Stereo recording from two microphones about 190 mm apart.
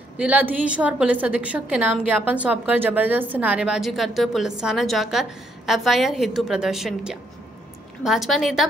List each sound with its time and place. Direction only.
0.2 s a woman's voice: 10° right (ahead or behind)